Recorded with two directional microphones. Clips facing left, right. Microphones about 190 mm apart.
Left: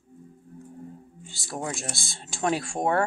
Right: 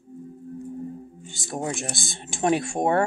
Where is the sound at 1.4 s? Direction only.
20° right (ahead or behind).